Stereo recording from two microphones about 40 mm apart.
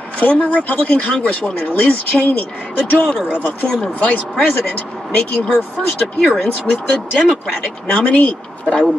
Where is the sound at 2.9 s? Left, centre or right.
Left.